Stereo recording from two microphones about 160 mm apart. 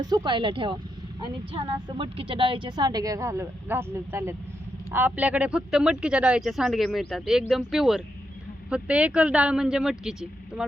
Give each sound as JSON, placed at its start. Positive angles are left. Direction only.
{"t": 0.0, "sound": "a woman's voice", "side_deg": -25}